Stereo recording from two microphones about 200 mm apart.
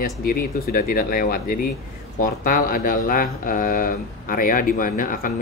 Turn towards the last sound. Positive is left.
turn(degrees=45)  # may be behind; listen again after turning